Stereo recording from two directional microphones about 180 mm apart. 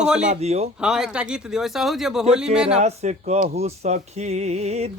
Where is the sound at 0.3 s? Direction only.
35° right (ahead or behind).